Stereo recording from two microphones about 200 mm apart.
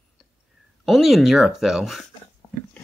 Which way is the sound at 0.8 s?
Centre (ahead or behind).